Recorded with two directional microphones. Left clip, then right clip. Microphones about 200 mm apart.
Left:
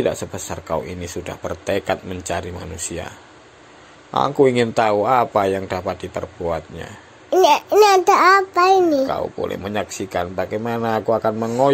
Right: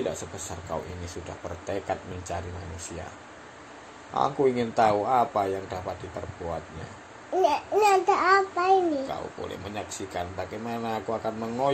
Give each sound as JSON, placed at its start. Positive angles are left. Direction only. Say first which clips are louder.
{"t": 0.7, "sound": "a child's voice", "louder": "left 10 dB", "side_deg": 50}
{"t": 4.1, "sound": "a child's voice", "louder": "left 8 dB", "side_deg": 50}
{"t": 7.3, "sound": "a child's voice", "louder": "left 10 dB", "side_deg": 55}